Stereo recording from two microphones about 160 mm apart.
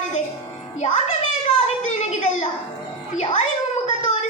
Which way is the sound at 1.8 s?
50° left (ahead or behind).